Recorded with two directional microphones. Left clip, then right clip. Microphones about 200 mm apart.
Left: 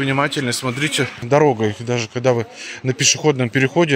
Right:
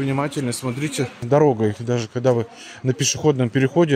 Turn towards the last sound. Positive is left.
turn(degrees=-20)  # may be behind; listen again after turning